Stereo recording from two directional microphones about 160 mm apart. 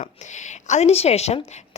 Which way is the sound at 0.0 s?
50° left (ahead or behind).